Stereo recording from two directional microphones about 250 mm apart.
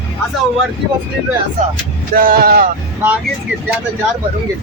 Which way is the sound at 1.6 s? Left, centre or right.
Right.